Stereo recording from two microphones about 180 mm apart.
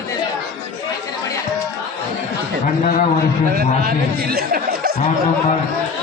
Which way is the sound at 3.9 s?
55° right (ahead or behind).